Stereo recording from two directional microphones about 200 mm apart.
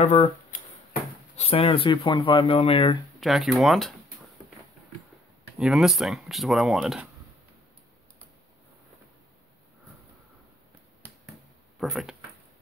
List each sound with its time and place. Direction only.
0.0 s speech: 35° left (ahead or behind)
3.2 s speech: centre (ahead or behind)
5.6 s speech: centre (ahead or behind)
11.8 s speech: centre (ahead or behind)